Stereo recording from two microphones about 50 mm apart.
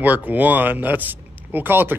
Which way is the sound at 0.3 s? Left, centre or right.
Right.